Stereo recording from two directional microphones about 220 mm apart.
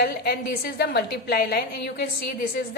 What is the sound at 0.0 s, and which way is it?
A woman's voice, 45° left (ahead or behind).